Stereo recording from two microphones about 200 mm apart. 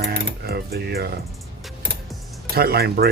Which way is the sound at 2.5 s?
50° right (ahead or behind).